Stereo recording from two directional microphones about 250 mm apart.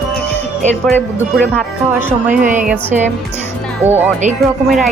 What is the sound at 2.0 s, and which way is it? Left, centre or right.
Speech, centre.